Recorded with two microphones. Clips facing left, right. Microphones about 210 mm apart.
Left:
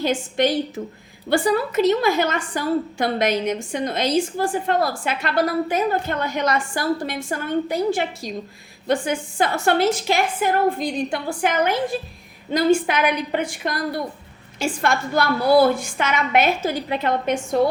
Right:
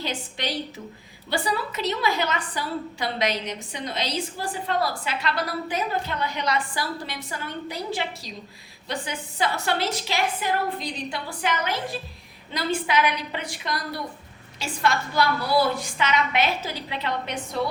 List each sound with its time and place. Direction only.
0.0 s a woman's voice: 50° left (ahead or behind)